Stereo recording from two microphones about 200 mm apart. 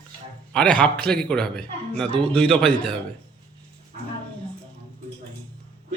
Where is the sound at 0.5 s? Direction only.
5° left (ahead or behind).